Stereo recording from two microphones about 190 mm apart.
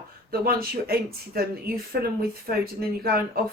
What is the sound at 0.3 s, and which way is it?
Speech, 50° right (ahead or behind).